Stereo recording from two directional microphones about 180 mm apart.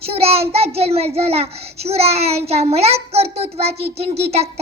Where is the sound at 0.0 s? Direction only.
35° right (ahead or behind).